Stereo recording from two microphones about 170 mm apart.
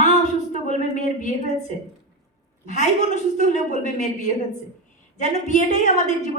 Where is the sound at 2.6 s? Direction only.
45° left (ahead or behind).